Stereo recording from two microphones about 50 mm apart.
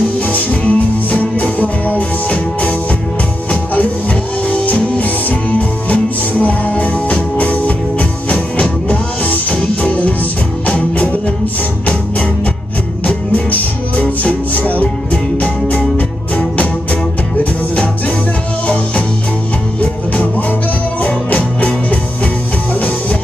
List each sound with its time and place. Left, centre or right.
0.3 s music: left
4.5 s music: left
13.0 s music: left
21.0 s music: left